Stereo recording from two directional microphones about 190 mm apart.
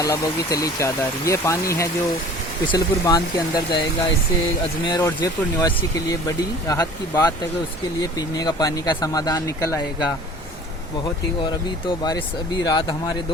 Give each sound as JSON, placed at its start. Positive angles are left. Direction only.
{"t": 0.0, "sound": "speech", "side_deg": 15}
{"t": 8.4, "sound": "speech", "side_deg": 20}
{"t": 12.6, "sound": "speech", "side_deg": 20}